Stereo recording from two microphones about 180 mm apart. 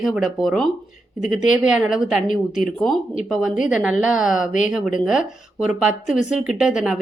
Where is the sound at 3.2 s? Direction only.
Centre (ahead or behind).